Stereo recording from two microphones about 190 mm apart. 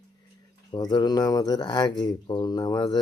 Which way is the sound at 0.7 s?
25° left (ahead or behind).